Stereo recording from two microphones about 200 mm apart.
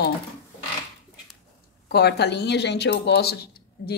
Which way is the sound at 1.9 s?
55° left (ahead or behind).